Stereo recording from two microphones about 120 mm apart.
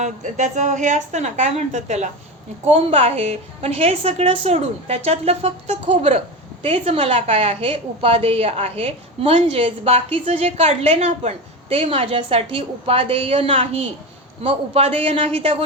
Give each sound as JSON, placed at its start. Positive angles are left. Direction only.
{"t": 0.0, "sound": "a woman's voice", "side_deg": -90}
{"t": 2.6, "sound": "a woman's voice", "side_deg": -55}